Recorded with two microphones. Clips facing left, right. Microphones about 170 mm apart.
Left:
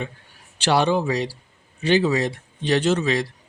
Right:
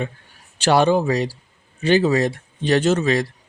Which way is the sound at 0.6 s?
45° right (ahead or behind).